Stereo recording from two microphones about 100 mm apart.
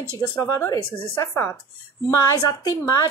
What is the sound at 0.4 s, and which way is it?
A woman's voice, 30° left (ahead or behind).